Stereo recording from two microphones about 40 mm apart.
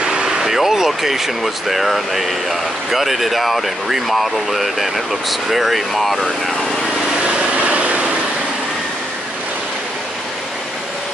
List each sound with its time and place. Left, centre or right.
0.0 s vehicle: centre
0.5 s speech: centre
7.2 s vehicle: right